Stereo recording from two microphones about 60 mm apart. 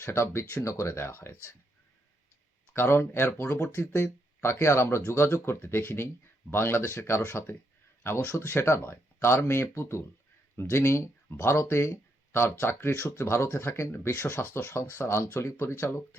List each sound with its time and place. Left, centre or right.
0.0 s speech: left
2.7 s speech: left
12.9 s speech: left